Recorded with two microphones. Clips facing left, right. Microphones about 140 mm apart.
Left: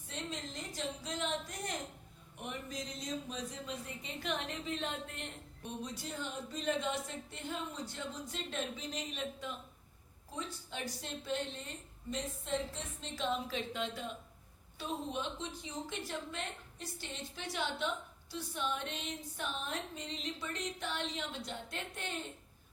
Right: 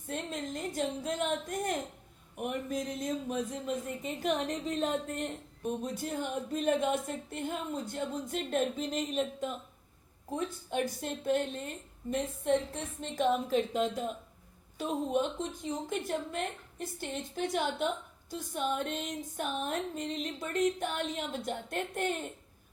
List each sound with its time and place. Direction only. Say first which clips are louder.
0.1 s a woman's voice: right 6 dB; 50° right (ahead or behind)